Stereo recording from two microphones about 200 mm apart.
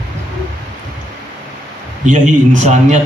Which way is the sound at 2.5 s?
35° right (ahead or behind).